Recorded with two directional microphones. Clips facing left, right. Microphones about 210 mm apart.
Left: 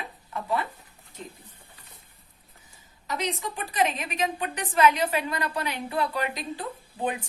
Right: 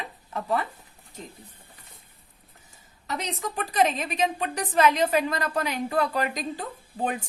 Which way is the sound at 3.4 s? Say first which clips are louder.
Right 6 dB; 40° right (ahead or behind).